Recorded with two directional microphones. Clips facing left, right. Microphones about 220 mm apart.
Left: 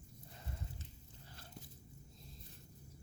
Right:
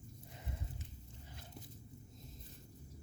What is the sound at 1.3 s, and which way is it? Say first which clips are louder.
Biting: right 1 dB; 20° right (ahead or behind).